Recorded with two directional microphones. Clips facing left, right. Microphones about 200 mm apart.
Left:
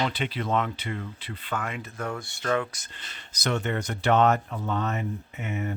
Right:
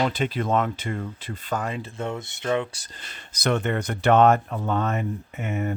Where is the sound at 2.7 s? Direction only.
35° right (ahead or behind).